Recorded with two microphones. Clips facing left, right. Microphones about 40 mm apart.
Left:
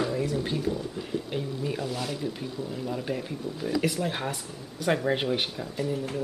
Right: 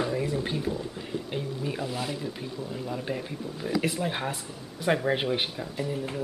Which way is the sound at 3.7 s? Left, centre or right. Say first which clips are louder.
Even; centre.